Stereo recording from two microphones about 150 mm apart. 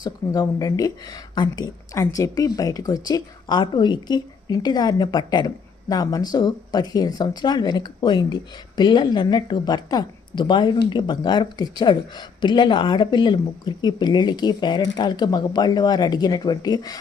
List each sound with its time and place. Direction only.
0.0 s speech: 25° left (ahead or behind)